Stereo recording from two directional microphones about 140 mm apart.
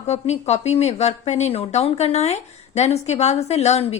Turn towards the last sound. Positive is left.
turn(degrees=50)  # may be behind; listen again after turning